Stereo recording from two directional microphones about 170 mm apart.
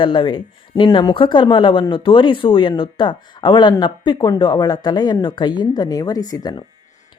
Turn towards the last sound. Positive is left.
turn(degrees=20)  # may be behind; listen again after turning